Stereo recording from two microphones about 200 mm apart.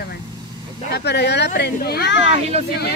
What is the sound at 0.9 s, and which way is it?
Speech, 55° left (ahead or behind).